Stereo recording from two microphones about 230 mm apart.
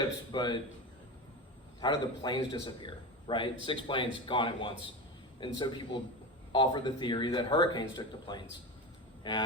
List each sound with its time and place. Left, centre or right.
0.3 s speech: centre
1.8 s a man's voice: centre